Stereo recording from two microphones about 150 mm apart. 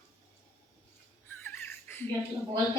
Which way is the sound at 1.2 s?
15° left (ahead or behind).